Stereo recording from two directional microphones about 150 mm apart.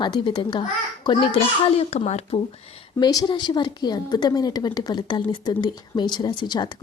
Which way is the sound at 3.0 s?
25° left (ahead or behind).